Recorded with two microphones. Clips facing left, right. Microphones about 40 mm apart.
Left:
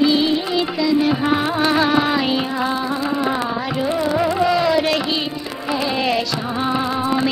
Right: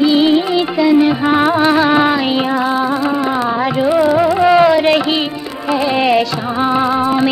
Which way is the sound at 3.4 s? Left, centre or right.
Right.